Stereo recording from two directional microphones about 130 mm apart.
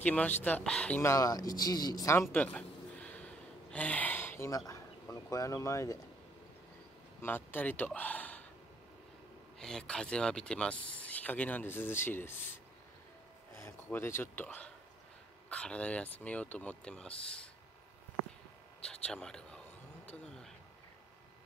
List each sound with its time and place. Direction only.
0.0 s speech: 10° left (ahead or behind)
1.1 s speech: 25° left (ahead or behind)
2.3 s gasp: 10° left (ahead or behind)
4.5 s speech: 25° left (ahead or behind)
7.2 s speech: 15° left (ahead or behind)
9.6 s speech: 5° left (ahead or behind)
13.6 s speech: 15° left (ahead or behind)
18.9 s speech: 5° left (ahead or behind)
20.1 s a sound: 5° left (ahead or behind)